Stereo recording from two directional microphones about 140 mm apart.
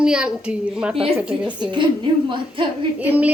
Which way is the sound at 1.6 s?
35° right (ahead or behind).